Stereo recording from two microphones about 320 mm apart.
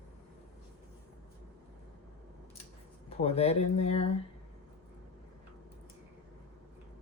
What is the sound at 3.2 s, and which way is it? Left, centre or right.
Speech, centre.